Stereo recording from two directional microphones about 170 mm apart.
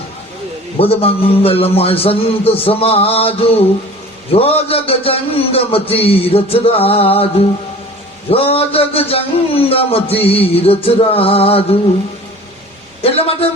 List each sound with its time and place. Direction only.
0.8 s a man's voice: 35° left (ahead or behind)
8.3 s a man's voice: 35° left (ahead or behind)
13.0 s a man's voice: 35° left (ahead or behind)